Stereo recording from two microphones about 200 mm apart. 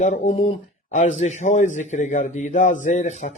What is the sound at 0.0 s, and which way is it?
Speech, 35° left (ahead or behind).